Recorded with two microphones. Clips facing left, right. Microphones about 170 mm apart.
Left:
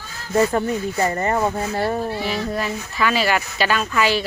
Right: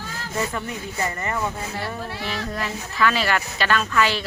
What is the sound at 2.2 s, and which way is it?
A woman's voice, 5° left (ahead or behind).